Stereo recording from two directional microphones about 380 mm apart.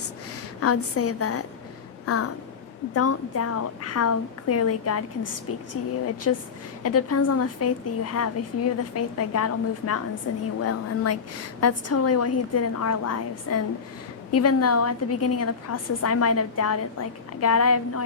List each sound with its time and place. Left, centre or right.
0.6 s a woman's voice: left